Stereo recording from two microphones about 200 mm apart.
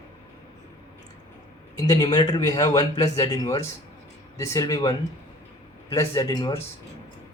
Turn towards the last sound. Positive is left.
turn(degrees=20)  # may be behind; listen again after turning